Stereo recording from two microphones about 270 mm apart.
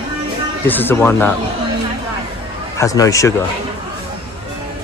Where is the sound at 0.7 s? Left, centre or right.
Centre.